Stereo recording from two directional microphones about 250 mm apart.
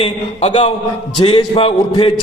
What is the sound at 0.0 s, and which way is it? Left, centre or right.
A man's voice, left.